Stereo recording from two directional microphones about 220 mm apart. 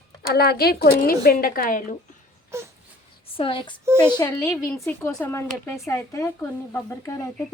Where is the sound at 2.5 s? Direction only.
15° right (ahead or behind).